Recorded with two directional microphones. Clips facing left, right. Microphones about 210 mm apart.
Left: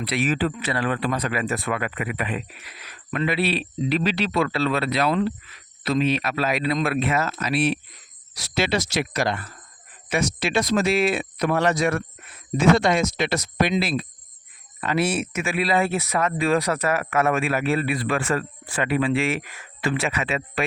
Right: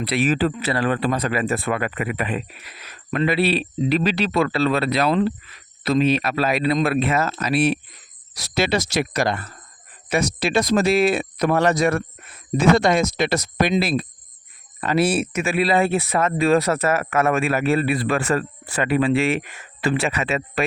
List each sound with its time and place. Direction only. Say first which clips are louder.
0.0 s speech: right 3 dB; 35° right (ahead or behind)
19.4 s speech: right 3 dB; 25° right (ahead or behind); by 20.7 s 40° right (ahead or behind)